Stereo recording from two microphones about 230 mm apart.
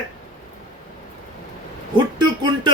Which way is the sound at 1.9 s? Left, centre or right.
Centre.